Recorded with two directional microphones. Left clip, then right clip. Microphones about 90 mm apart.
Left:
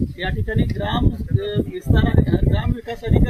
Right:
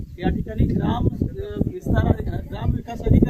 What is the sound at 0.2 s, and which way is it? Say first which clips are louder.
Speech: right 1 dB; 15° right (ahead or behind).